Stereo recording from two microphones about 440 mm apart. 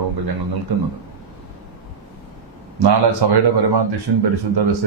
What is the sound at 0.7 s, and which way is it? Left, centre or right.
Speech, right.